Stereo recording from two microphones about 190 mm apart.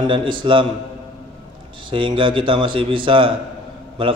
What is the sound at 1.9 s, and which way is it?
A man's voice, 25° right (ahead or behind).